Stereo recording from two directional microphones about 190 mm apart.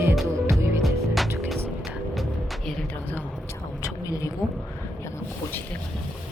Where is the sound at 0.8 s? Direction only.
Centre (ahead or behind).